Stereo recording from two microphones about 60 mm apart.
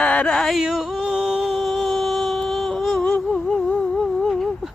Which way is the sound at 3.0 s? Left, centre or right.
Centre.